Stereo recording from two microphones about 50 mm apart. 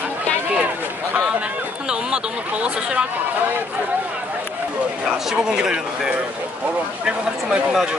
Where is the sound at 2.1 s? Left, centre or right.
Right.